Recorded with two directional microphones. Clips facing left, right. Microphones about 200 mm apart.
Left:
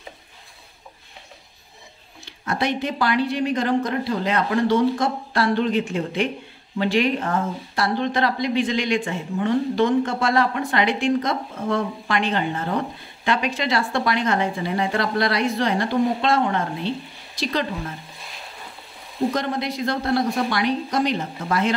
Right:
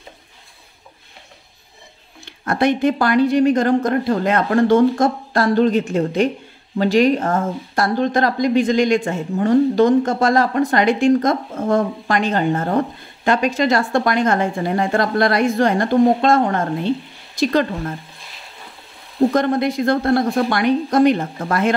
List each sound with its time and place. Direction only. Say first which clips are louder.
2.4 s speech: right 7 dB; 50° right (ahead or behind)
19.3 s speech: right 8 dB; 50° right (ahead or behind)